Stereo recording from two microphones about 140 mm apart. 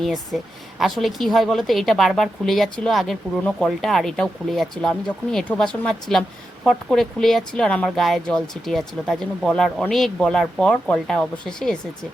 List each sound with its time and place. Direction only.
0.0 s speech: centre (ahead or behind)